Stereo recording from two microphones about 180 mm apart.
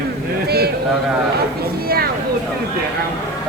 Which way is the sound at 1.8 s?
60° right (ahead or behind).